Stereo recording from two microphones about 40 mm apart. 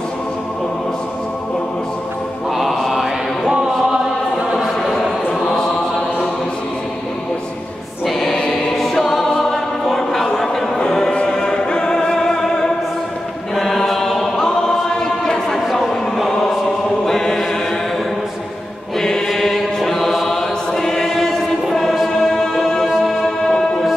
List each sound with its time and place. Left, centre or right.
2.7 s chant: centre
4.6 s choir: centre
5.3 s chant: centre
8.1 s choir: centre
11.2 s music: centre
13.6 s chant: centre
14.3 s choir: centre
18.9 s choir: centre
22.2 s music: centre
23.2 s music: centre